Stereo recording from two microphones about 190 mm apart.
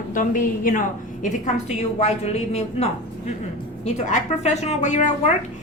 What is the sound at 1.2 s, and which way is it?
A woman's voice, 35° left (ahead or behind).